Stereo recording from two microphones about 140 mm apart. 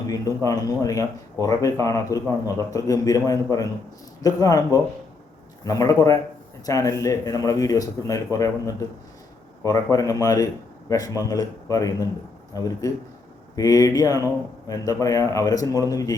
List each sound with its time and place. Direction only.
0.1 s speech: 25° left (ahead or behind)